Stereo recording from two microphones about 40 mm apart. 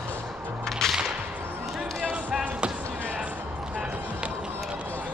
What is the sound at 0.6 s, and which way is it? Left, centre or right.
Whip, centre.